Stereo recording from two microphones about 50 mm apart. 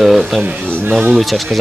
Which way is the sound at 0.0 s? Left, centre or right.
Centre.